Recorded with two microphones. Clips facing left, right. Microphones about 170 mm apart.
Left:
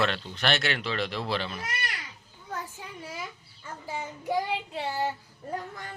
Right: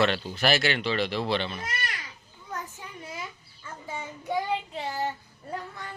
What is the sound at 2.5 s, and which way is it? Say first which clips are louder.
Child singing: even; 5° left (ahead or behind).